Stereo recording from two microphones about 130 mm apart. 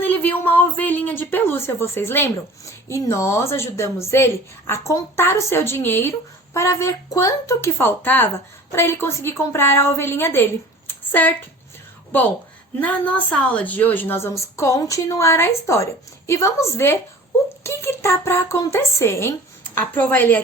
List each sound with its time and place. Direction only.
0.0 s a woman's voice: 15° left (ahead or behind)
12.8 s a woman's voice: 10° left (ahead or behind)